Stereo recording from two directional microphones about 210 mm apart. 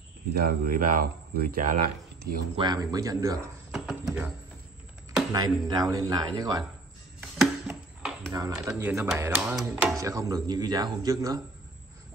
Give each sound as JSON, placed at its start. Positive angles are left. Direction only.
{"t": 0.4, "sound": "speech", "side_deg": -45}
{"t": 2.5, "sound": "a man's voice", "side_deg": -20}
{"t": 3.7, "sound": "a sound", "side_deg": 0}
{"t": 5.3, "sound": "speech", "side_deg": -20}
{"t": 7.2, "sound": "music", "side_deg": -5}
{"t": 8.3, "sound": "a man's voice", "side_deg": -15}